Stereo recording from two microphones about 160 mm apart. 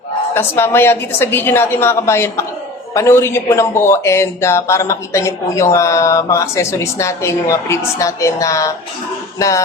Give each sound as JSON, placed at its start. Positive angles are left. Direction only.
{"t": 0.3, "sound": "speech", "side_deg": 15}